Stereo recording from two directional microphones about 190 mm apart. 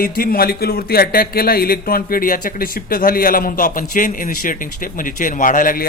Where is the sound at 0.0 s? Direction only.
50° left (ahead or behind).